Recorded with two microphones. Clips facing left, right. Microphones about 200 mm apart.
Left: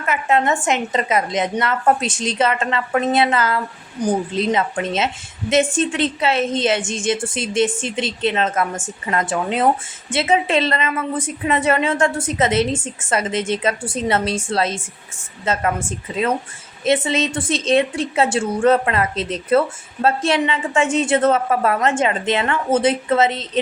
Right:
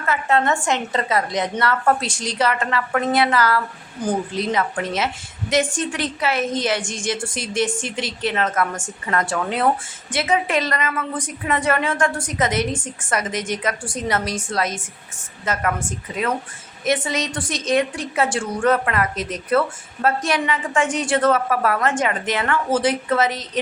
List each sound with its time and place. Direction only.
0.0 s a woman's voice: 20° left (ahead or behind)
16.8 s a woman's voice: 25° left (ahead or behind)